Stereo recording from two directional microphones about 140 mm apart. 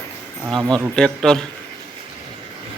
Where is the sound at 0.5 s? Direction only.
5° left (ahead or behind).